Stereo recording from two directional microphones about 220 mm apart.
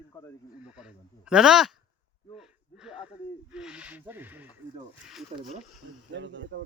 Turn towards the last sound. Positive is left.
turn(degrees=-55)  # may be behind; listen again after turning